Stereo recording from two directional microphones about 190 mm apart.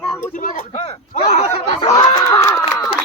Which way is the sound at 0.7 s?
25° left (ahead or behind).